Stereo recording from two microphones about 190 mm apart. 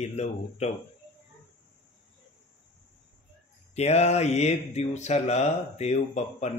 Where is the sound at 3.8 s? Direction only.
35° left (ahead or behind).